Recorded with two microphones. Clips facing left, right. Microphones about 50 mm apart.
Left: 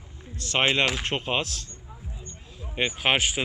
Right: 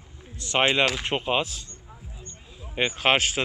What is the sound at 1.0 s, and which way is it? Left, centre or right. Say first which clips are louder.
Speech: right 2 dB; centre.